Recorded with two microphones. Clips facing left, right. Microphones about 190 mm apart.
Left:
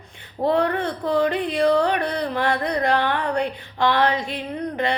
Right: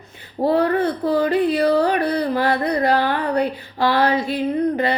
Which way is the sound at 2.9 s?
35° right (ahead or behind).